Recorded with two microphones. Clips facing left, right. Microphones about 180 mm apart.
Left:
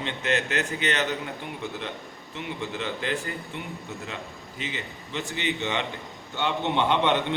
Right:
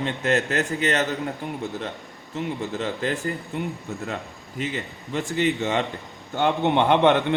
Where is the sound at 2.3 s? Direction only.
40° right (ahead or behind).